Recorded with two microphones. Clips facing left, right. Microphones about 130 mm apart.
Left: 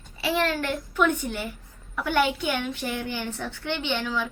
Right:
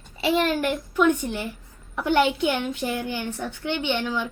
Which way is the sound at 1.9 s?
20° right (ahead or behind).